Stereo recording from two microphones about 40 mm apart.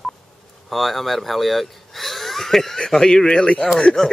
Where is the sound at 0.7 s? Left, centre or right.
Centre.